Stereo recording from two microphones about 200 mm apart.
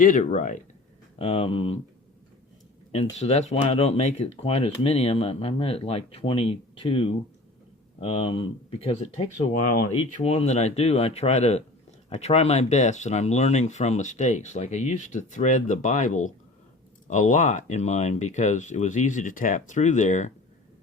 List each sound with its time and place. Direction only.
0.0 s speech: 40° left (ahead or behind)
2.9 s speech: 30° left (ahead or behind)